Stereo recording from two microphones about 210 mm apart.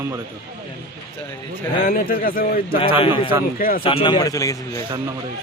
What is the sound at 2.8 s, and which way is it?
Speech, 25° left (ahead or behind).